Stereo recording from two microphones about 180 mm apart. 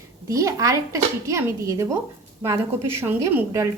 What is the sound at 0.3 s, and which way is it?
A woman's voice, 15° right (ahead or behind).